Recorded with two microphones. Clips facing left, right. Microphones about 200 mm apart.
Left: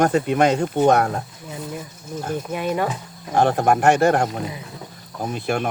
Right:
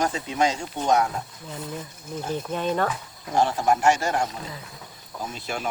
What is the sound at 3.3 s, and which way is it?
Speech, 55° left (ahead or behind).